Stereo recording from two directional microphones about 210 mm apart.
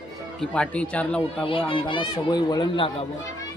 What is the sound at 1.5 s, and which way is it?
Speech, 25° left (ahead or behind).